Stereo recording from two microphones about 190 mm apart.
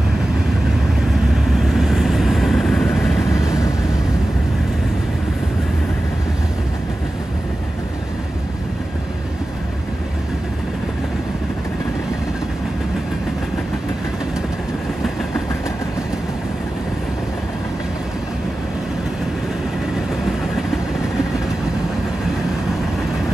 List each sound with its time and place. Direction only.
1.8 s vehicle: centre (ahead or behind)